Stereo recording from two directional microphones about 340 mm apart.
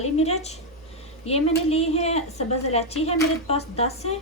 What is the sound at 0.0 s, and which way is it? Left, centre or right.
A woman's voice, centre.